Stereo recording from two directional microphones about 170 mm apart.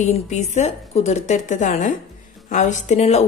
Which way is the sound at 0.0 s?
40° left (ahead or behind).